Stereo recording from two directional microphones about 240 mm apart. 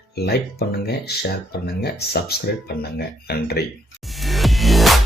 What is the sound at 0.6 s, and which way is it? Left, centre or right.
Speech, left.